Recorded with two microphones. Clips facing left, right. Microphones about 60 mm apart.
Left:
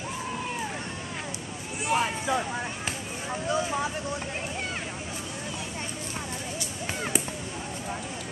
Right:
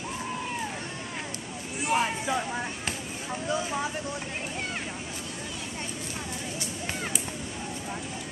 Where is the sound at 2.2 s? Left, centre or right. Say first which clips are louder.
Left 1 dB; centre.